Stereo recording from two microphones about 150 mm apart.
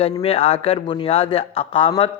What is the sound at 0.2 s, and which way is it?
Speech, 40° left (ahead or behind).